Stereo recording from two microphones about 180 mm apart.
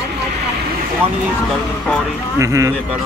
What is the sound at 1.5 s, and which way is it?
Speech, 5° left (ahead or behind).